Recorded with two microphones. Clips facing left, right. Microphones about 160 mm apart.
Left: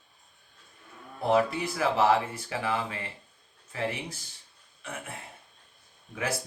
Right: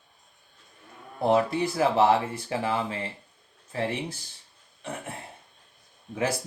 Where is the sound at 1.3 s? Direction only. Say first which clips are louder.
Right 2 dB; 30° right (ahead or behind).